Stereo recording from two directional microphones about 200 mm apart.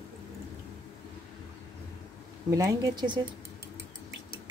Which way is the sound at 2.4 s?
15° right (ahead or behind).